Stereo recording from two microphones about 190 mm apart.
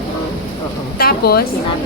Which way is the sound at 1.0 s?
55° left (ahead or behind).